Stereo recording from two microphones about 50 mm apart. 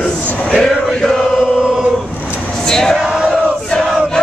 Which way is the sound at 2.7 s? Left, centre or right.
Centre.